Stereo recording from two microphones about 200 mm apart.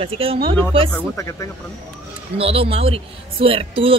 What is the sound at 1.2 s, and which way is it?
Speech, 15° left (ahead or behind).